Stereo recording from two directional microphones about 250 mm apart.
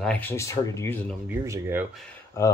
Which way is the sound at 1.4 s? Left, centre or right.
Centre.